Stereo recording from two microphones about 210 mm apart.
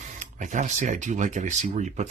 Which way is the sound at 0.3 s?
35° right (ahead or behind).